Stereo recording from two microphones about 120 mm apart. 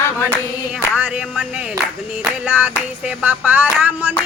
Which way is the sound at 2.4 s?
15° right (ahead or behind).